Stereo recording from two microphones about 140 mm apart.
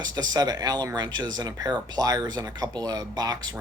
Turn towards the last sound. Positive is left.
turn(degrees=-30)  # may be behind; listen again after turning